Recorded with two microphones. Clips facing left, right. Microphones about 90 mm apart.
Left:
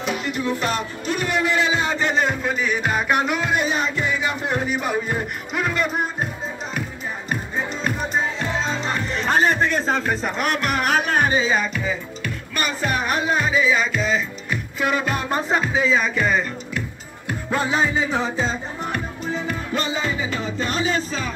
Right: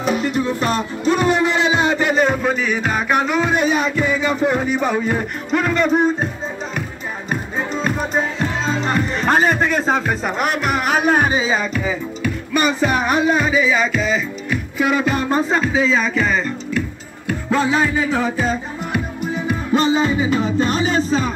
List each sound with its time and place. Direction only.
0.0 s music: 40° right (ahead or behind); by 2.1 s 20° right (ahead or behind)
2.1 s music: centre (ahead or behind)
9.1 s music: 5° right (ahead or behind)
11.5 s music: 5° right (ahead or behind); by 18.6 s 20° left (ahead or behind)
19.8 s music: 25° right (ahead or behind)
20.7 s music: 35° right (ahead or behind)